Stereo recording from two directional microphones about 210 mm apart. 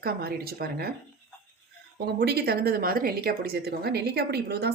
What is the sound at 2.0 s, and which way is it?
Speech, 50° right (ahead or behind).